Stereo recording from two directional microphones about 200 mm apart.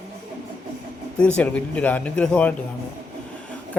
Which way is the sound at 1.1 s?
5° left (ahead or behind).